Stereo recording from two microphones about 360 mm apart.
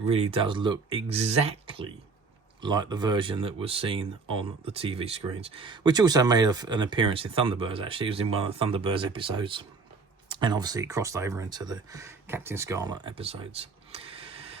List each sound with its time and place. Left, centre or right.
0.0 s speech: centre